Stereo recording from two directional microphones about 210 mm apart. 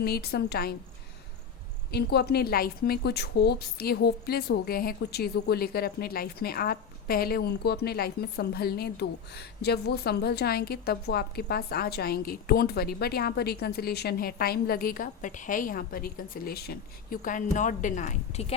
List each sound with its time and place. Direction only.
0.0 s speech: 50° left (ahead or behind)
1.9 s speech: 50° left (ahead or behind); by 18.5 s 30° left (ahead or behind)